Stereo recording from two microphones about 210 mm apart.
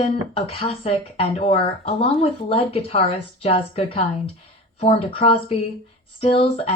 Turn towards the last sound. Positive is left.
turn(degrees=25)  # may be behind; listen again after turning